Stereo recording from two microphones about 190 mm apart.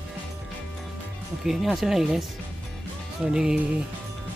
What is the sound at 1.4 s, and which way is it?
Speech, centre (ahead or behind).